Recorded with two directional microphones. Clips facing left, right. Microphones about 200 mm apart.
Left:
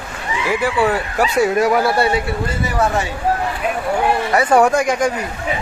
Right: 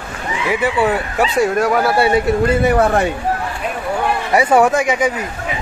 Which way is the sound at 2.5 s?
60° right (ahead or behind).